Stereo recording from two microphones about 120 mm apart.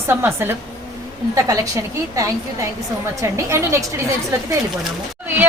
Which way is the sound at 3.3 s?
25° right (ahead or behind).